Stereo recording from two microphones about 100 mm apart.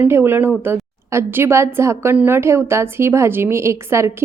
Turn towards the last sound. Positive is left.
turn(degrees=-25)  # may be behind; listen again after turning